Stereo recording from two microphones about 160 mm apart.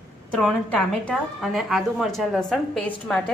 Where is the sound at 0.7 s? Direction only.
5° left (ahead or behind).